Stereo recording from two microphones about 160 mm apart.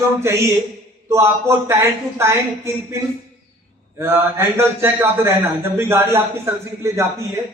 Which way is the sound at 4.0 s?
15° right (ahead or behind).